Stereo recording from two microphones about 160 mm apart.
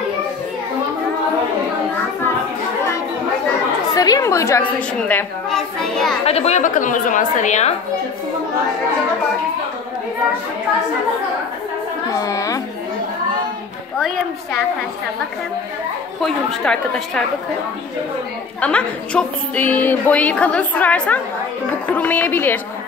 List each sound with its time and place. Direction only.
3.9 s a woman's voice: 20° left (ahead or behind); by 6.1 s centre (ahead or behind)
6.2 s a woman's voice: 40° left (ahead or behind)
12.2 s a sound: 20° left (ahead or behind)
16.2 s a woman's voice: centre (ahead or behind)
18.6 s a woman's voice: 5° left (ahead or behind)